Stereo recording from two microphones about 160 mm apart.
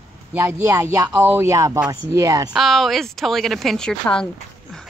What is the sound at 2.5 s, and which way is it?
A woman's voice, centre (ahead or behind).